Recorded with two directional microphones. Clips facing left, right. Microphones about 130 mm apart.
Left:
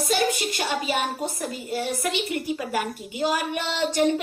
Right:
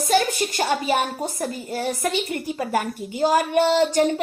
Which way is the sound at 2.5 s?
40° right (ahead or behind).